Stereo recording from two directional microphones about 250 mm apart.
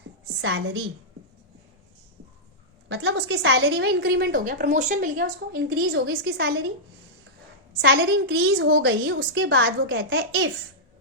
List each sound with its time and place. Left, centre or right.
0.4 s a woman's voice: right
2.9 s a woman's voice: right
7.8 s a woman's voice: right